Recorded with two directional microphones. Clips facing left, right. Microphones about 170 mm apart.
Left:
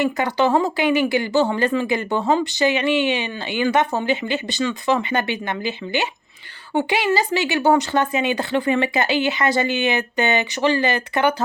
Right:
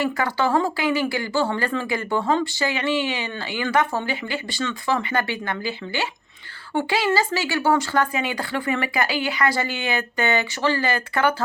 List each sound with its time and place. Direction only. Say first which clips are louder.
0.0 s speech: left 3 dB; 20° left (ahead or behind)